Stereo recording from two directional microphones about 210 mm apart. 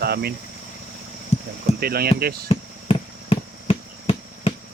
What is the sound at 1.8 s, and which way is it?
Speech, 45° right (ahead or behind).